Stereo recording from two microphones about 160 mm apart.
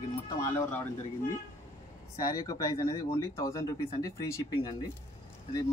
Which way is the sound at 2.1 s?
25° left (ahead or behind).